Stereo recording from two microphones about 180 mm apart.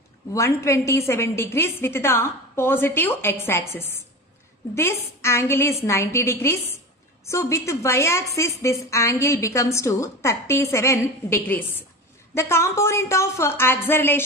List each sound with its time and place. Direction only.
0.3 s a woman's voice: 15° left (ahead or behind)